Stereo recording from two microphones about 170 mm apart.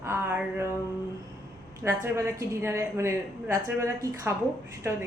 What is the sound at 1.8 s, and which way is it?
A woman's voice, 15° right (ahead or behind).